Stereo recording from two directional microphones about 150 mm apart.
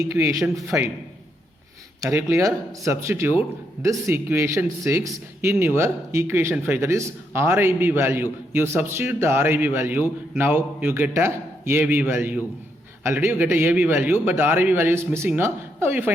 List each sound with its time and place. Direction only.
0.0 s speech: 20° right (ahead or behind)
2.0 s speech: 15° right (ahead or behind)